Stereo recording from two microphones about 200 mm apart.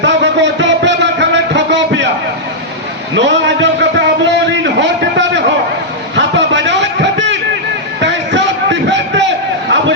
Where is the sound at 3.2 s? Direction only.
65° right (ahead or behind).